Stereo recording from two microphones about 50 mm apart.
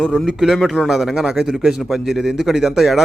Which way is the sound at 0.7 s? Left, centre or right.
Centre.